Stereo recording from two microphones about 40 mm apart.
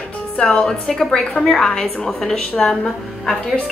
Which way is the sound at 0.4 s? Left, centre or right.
Left.